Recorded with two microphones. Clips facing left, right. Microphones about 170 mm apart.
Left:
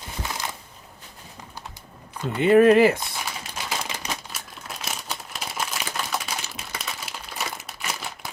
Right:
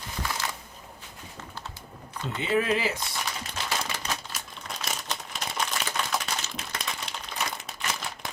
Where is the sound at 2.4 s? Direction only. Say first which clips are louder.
Left 12 dB; 55° left (ahead or behind).